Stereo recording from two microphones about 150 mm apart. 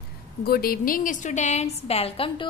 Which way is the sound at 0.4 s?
85° left.